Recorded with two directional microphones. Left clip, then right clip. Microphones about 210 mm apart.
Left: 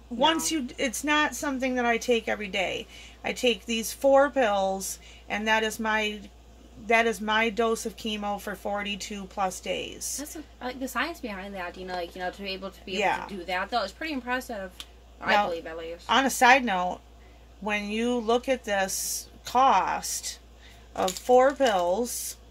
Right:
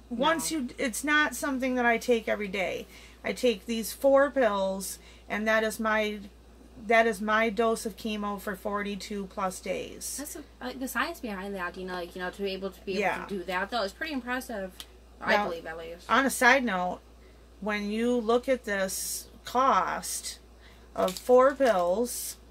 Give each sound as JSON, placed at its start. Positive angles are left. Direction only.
{"t": 0.4, "sound": "speech", "side_deg": 5}
{"t": 10.6, "sound": "a woman's voice", "side_deg": -20}
{"t": 16.1, "sound": "speech", "side_deg": 10}